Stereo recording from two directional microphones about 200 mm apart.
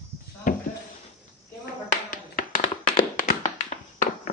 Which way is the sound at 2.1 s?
45° left (ahead or behind).